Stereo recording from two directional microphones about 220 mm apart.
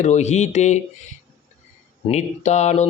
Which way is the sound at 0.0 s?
30° left (ahead or behind).